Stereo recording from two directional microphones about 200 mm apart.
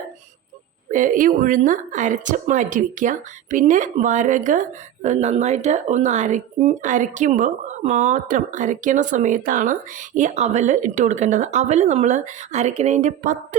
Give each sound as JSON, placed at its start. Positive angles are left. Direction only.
{"t": 0.9, "sound": "speech", "side_deg": -40}